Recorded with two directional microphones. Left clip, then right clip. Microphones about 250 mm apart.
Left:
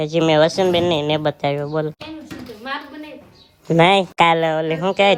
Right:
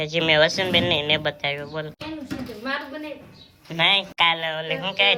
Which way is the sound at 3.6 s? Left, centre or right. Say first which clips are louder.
Left 6 dB; left.